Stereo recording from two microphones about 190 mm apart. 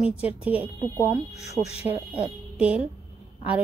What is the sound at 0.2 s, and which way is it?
Speech, 5° right (ahead or behind).